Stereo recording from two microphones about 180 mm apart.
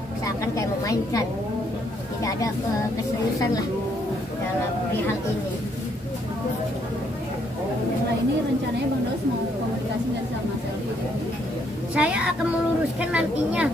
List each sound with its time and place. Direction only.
0.6 s a woman's voice: 20° left (ahead or behind)
11.9 s a woman's voice: 5° right (ahead or behind)